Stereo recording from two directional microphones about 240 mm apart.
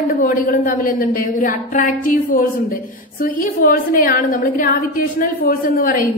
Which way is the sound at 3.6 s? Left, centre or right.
Left.